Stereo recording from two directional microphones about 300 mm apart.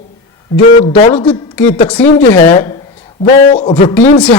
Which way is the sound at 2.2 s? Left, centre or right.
Centre.